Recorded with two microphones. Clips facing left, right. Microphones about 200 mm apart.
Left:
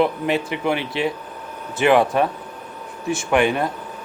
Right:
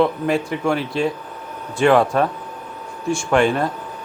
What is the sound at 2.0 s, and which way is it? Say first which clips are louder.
Speech: right 1 dB; 15° left (ahead or behind).